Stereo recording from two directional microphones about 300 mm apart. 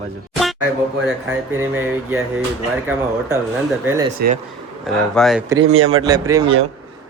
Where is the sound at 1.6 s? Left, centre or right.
Centre.